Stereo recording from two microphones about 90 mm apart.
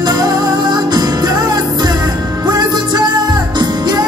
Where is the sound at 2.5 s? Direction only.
50° right (ahead or behind).